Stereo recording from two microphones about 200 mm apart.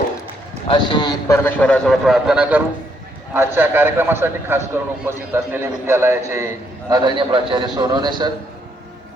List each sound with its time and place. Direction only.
0.7 s a man's voice: 20° left (ahead or behind)
1.5 s a man's voice: 5° left (ahead or behind); by 8.1 s 20° right (ahead or behind)